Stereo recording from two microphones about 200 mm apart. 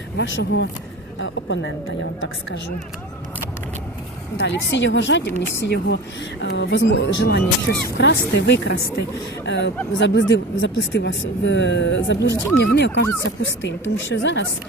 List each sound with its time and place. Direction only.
0.2 s a woman's voice: 65° left (ahead or behind)
4.4 s speech: 65° left (ahead or behind)